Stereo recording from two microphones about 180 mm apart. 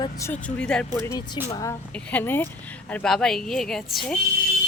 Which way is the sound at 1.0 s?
20° left (ahead or behind).